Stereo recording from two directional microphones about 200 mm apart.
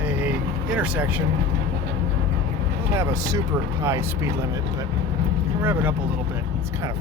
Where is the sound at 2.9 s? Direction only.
15° right (ahead or behind).